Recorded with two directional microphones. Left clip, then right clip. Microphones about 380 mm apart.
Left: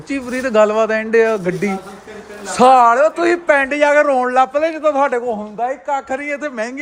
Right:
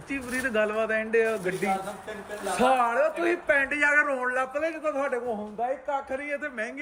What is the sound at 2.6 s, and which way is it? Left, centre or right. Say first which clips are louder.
Speech: left 14 dB; centre.